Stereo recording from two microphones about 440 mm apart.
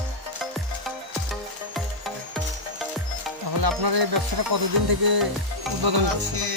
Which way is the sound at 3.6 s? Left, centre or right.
Right.